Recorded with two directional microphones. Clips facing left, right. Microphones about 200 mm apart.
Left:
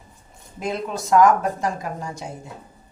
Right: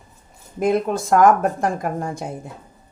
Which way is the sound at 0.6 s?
55° right (ahead or behind).